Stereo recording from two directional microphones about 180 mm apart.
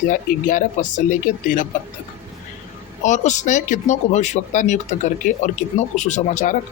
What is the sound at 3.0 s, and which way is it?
Speech, 40° left (ahead or behind).